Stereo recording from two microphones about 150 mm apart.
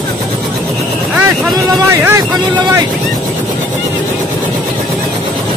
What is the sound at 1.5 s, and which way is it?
Vehicle, 20° right (ahead or behind).